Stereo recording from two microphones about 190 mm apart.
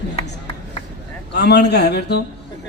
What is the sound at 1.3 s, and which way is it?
Speech, 60° left (ahead or behind).